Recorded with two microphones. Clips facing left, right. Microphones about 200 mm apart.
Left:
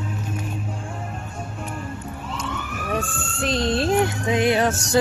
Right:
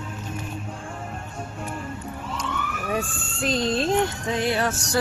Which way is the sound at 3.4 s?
Centre (ahead or behind).